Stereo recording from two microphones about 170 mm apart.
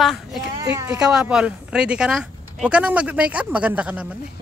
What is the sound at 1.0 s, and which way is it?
Speech, 5° right (ahead or behind).